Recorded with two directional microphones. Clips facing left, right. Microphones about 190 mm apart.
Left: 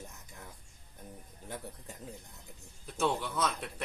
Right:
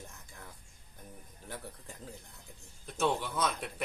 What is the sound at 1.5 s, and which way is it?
Speech, 20° left (ahead or behind).